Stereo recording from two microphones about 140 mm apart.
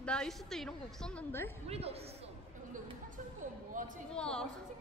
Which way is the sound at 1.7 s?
45° right (ahead or behind).